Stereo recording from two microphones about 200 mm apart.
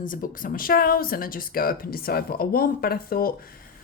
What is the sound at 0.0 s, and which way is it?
Speech, 45° left (ahead or behind).